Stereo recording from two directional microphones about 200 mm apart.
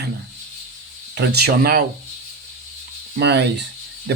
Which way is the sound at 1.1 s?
55° right (ahead or behind).